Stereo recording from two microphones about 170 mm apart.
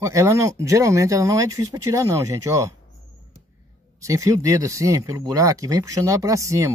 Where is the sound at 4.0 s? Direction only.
20° right (ahead or behind).